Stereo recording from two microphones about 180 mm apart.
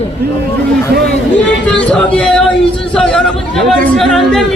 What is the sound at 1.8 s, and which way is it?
Speech, 5° left (ahead or behind).